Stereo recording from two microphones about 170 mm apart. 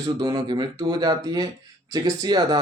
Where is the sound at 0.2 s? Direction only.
25° right (ahead or behind).